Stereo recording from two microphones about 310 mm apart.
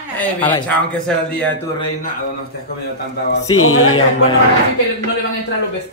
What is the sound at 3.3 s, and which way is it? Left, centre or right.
Mantra, left.